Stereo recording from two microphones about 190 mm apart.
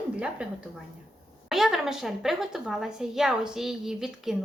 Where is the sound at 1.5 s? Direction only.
Centre (ahead or behind).